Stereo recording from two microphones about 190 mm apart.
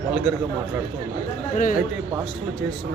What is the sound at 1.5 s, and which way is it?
Speech, 45° left (ahead or behind).